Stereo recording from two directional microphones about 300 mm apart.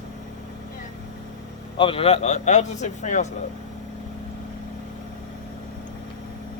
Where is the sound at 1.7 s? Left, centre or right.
Centre.